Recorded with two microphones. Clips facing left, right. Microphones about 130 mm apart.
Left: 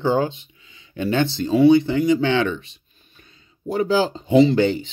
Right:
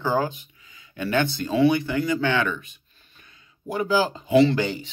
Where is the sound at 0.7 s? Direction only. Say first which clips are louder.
Left 3 dB; 25° left (ahead or behind).